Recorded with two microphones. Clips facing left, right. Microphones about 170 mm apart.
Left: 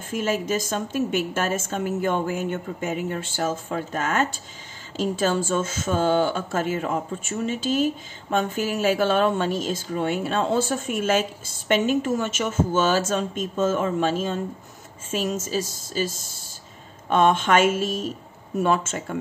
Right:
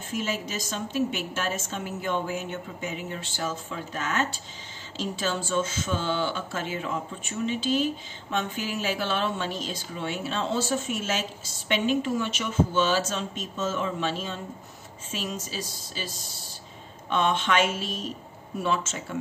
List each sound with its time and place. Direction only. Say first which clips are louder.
0.1 s speech: left 7 dB; 50° left (ahead or behind)